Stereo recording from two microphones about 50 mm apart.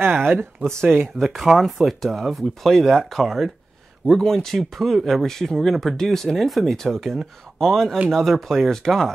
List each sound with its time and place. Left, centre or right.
0.0 s speech: right
1.2 s speech: centre